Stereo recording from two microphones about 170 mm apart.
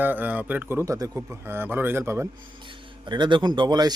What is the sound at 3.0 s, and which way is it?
Speech, 25° right (ahead or behind).